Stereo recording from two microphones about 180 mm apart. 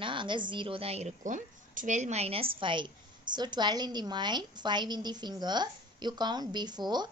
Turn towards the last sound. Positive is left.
turn(degrees=-25)  # may be behind; listen again after turning